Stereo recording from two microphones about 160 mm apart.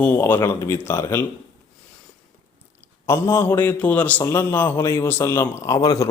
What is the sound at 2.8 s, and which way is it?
A man's voice, 15° left (ahead or behind).